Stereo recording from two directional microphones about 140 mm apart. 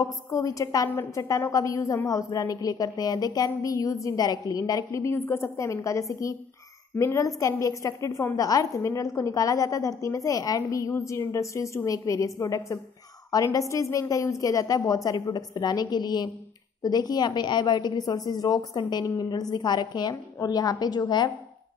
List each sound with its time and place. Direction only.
0.0 s a woman's voice: 25° left (ahead or behind)